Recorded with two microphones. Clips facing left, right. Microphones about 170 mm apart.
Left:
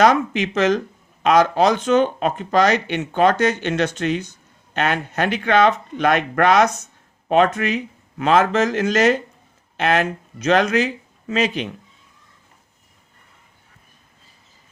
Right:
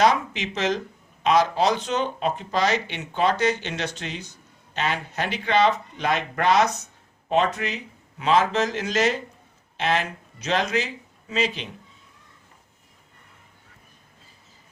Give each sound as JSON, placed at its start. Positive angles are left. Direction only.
{"t": 0.0, "sound": "speech", "side_deg": 55}